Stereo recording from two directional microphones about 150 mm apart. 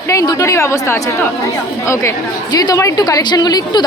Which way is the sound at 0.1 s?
20° left (ahead or behind).